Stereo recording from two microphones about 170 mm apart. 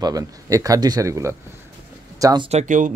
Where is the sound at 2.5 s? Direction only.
45° right (ahead or behind).